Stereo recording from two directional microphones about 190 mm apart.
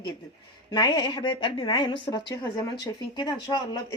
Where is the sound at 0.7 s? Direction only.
20° left (ahead or behind).